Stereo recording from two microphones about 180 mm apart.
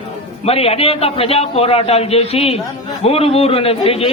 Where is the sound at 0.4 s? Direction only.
35° left (ahead or behind).